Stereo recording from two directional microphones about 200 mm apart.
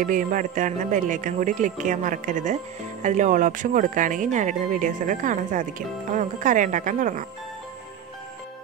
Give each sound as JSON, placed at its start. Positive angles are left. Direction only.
{"t": 0.0, "sound": "speech", "side_deg": -40}